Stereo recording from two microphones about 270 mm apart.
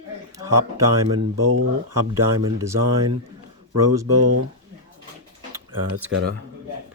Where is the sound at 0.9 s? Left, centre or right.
Right.